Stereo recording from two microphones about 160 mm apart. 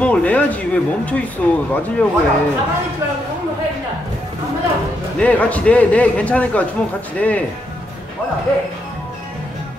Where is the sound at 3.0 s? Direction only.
15° right (ahead or behind).